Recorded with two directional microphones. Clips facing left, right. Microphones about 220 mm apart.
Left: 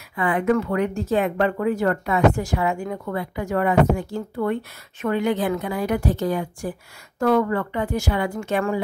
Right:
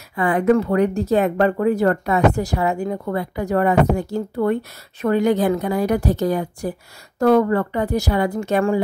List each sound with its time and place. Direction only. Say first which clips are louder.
0.1 s speech: right 4 dB; 40° right (ahead or behind)